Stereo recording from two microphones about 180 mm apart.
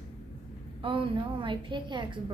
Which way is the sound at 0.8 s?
30° right (ahead or behind).